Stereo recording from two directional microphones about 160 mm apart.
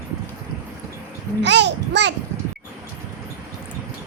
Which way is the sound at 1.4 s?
90° right.